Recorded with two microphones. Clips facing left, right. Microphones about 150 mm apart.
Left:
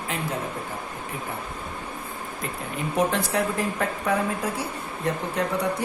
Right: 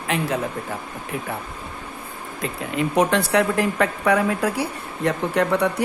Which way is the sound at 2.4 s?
85° right.